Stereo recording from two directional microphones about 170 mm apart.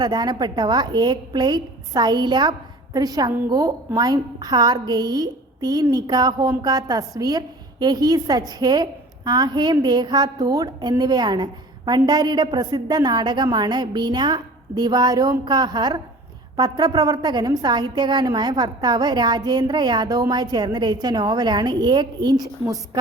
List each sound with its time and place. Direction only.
0.0 s a woman's voice: 25° right (ahead or behind)